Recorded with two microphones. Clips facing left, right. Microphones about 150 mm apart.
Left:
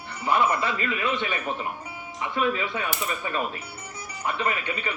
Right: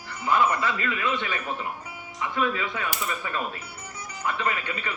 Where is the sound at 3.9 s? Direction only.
30° left (ahead or behind).